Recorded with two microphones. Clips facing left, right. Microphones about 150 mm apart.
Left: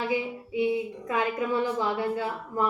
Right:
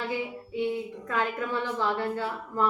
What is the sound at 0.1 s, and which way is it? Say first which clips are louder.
A woman's voice: left 3 dB; 10° left (ahead or behind).